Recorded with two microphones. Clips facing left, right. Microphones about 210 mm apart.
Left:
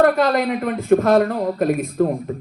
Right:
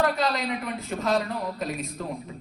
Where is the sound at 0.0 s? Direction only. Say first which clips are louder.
Left 9 dB; 55° left (ahead or behind).